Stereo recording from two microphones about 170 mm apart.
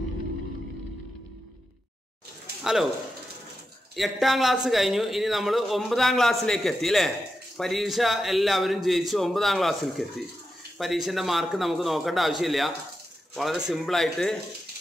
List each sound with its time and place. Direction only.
2.6 s speech: centre (ahead or behind)
3.9 s speech: centre (ahead or behind)
11.1 s speech: centre (ahead or behind)